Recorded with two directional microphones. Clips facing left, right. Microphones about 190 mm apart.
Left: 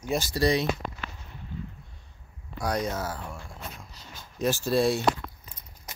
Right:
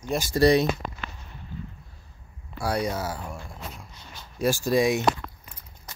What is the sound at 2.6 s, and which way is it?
Speech, 10° right (ahead or behind).